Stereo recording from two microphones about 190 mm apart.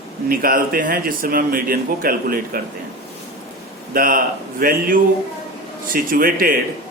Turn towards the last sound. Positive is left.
turn(degrees=-50)  # may be behind; listen again after turning